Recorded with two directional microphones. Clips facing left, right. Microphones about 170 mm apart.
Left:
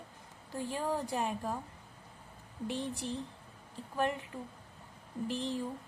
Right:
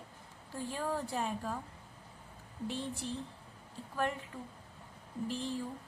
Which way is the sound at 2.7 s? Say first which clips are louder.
Left 2 dB; 15° left (ahead or behind).